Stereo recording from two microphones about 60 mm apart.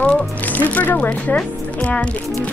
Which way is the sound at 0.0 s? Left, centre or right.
Left.